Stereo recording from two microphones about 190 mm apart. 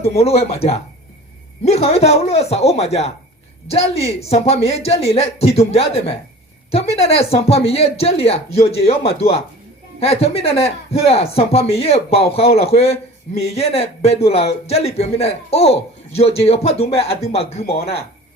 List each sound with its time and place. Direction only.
0.2 s a man's voice: 35° left (ahead or behind)